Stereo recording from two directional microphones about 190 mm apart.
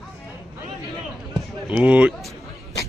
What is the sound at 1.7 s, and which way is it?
Speech, 5° right (ahead or behind).